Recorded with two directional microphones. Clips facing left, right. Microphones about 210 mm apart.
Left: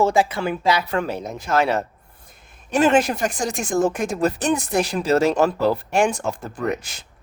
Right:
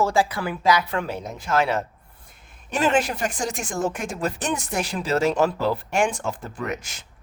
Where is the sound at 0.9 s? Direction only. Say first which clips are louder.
Left 4 dB; 40° left (ahead or behind).